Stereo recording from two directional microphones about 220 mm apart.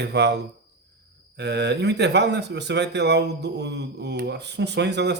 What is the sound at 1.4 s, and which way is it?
Speech, 50° right (ahead or behind).